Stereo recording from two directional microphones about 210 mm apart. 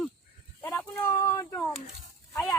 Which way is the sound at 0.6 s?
10° left (ahead or behind).